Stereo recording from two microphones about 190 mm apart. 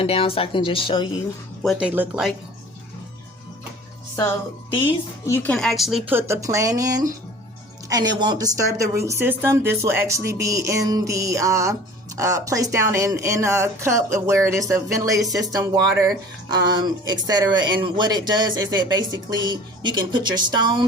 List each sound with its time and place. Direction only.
0.0 s speech: 30° left (ahead or behind)
1.6 s a woman's voice: 5° right (ahead or behind)
4.7 s a woman's voice: 25° left (ahead or behind); by 20.8 s 20° right (ahead or behind)